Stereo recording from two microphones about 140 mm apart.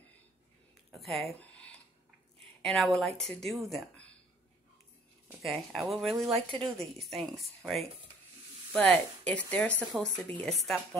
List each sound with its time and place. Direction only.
0.9 s a woman's voice: centre (ahead or behind)
5.4 s a woman's voice: centre (ahead or behind)
6.3 s speech: 40° right (ahead or behind)
7.0 s a woman's voice: centre (ahead or behind)